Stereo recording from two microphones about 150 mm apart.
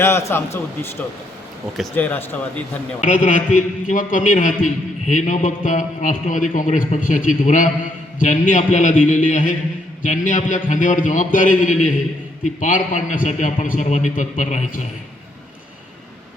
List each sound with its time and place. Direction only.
0.0 s a man's voice: 15° left (ahead or behind)
2.0 s a man's voice: 10° left (ahead or behind)
3.1 s a man's voice: 60° left (ahead or behind)